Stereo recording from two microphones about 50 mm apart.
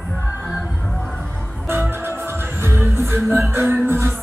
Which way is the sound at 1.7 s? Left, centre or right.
Right.